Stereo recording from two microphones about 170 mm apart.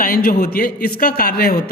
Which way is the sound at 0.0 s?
55° left (ahead or behind).